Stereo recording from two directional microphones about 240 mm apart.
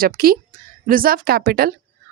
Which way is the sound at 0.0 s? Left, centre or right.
Right.